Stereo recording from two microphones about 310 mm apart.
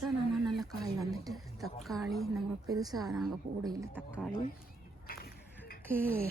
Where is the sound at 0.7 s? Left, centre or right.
Centre.